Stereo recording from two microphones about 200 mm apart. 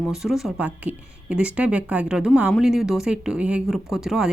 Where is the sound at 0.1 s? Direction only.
Centre (ahead or behind).